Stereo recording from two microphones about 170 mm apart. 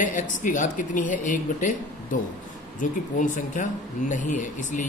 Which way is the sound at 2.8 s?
50° left (ahead or behind).